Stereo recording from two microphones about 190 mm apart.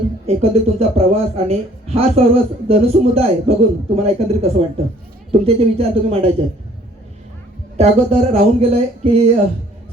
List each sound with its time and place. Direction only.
0.3 s speech: 30° right (ahead or behind)
7.8 s speech: 35° right (ahead or behind)